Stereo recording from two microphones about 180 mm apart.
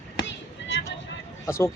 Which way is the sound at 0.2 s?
80° left.